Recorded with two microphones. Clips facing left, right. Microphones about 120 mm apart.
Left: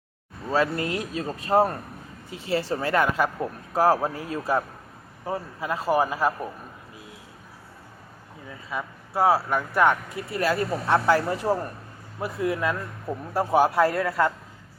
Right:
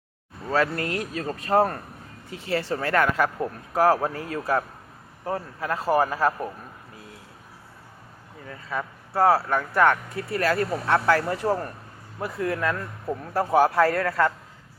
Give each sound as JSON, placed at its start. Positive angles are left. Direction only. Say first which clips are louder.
{"t": 0.5, "sound": "speech", "louder": "even", "side_deg": 20}
{"t": 8.4, "sound": "speech", "louder": "right 2 dB", "side_deg": 10}